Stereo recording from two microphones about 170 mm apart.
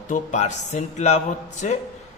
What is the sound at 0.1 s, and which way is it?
A man's voice, 45° left (ahead or behind).